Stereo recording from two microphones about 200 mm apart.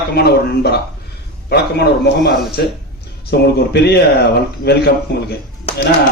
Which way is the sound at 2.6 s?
55° left (ahead or behind).